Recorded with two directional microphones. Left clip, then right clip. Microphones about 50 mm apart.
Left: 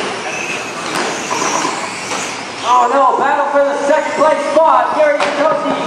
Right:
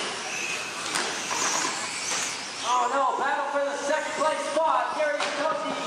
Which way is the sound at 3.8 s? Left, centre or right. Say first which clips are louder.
Left 14 dB; centre.